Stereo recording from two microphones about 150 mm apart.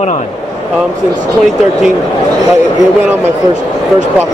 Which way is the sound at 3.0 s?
15° right (ahead or behind).